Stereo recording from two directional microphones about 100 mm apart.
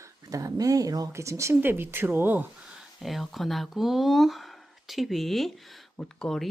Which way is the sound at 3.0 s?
Centre (ahead or behind).